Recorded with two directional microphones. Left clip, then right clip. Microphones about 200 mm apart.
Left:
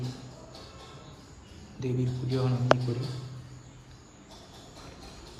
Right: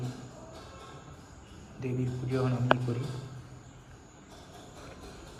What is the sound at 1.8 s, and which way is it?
Speech, 25° left (ahead or behind).